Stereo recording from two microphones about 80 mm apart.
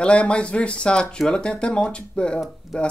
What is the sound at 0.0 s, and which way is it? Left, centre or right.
Speech, centre.